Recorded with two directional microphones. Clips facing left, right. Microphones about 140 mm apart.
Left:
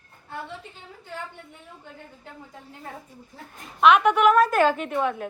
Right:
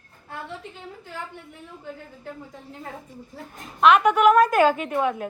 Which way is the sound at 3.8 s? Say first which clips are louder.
Right 1 dB; centre (ahead or behind).